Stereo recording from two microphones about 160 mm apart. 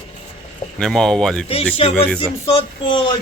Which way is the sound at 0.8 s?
5° left (ahead or behind).